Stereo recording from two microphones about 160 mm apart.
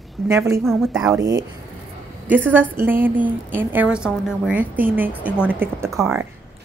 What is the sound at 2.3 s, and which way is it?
A woman's voice, 10° right (ahead or behind).